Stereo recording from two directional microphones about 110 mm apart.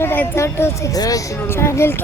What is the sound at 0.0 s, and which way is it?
A woman's voice, 20° left (ahead or behind).